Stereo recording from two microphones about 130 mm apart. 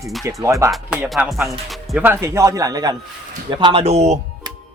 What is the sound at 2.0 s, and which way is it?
Speech, 20° right (ahead or behind).